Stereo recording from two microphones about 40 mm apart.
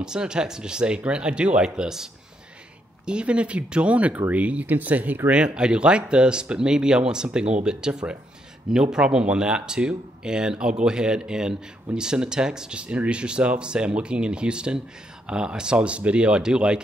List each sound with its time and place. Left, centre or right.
0.0 s speech: centre
3.1 s speech: right
4.6 s speech: right
5.3 s speech: right